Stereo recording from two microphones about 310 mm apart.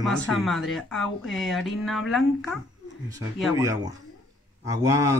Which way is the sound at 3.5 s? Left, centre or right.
Centre.